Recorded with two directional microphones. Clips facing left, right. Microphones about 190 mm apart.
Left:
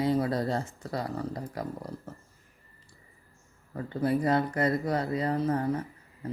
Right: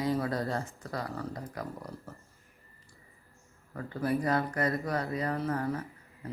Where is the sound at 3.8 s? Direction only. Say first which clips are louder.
Left 3 dB; 25° left (ahead or behind).